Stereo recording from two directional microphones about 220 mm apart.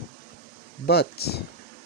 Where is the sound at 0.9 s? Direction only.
45° left (ahead or behind).